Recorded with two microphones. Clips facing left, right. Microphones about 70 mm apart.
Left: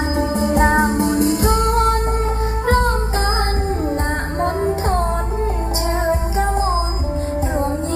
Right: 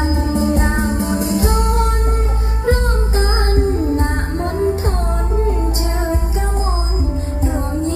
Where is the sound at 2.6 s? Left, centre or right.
Left.